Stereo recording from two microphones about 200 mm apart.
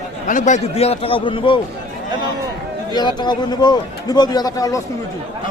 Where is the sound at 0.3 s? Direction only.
40° left (ahead or behind).